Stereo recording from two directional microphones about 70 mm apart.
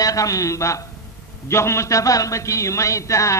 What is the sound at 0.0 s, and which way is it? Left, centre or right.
A man's voice, left.